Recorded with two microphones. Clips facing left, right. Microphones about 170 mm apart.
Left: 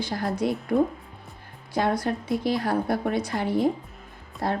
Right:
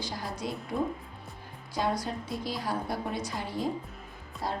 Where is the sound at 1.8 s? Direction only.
65° left (ahead or behind).